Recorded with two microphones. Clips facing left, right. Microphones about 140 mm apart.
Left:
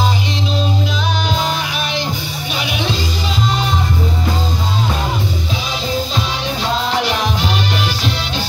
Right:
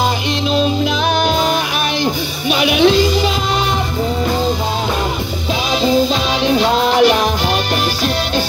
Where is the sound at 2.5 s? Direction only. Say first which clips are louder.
Right 11 dB; 70° right (ahead or behind).